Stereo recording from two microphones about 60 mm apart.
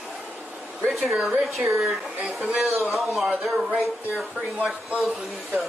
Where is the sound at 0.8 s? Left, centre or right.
Centre.